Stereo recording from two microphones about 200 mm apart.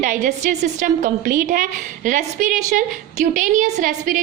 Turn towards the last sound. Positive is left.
turn(degrees=-40)  # may be behind; listen again after turning